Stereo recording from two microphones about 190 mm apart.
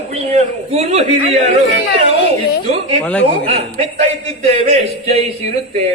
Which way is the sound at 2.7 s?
35° right (ahead or behind).